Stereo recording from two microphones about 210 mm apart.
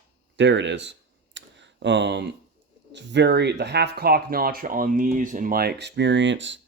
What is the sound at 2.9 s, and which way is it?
Speech, 55° right (ahead or behind).